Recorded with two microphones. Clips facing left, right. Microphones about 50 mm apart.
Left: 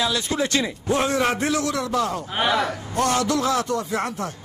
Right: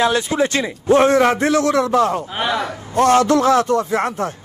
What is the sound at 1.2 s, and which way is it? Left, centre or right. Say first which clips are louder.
Speech: right 7 dB; right.